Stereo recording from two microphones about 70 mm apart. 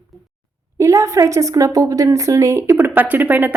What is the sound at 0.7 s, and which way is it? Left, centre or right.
A woman's voice, right.